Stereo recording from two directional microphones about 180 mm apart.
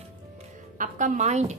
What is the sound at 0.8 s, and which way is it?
Speech, 45° right (ahead or behind).